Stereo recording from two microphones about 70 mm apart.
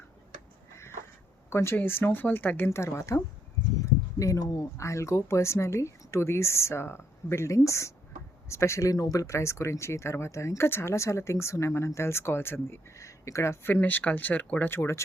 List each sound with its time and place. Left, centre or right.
1.5 s speech: left
2.6 s speech: left
14.7 s speech: left